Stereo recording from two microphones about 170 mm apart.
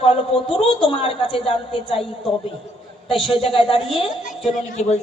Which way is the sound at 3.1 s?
30° left (ahead or behind).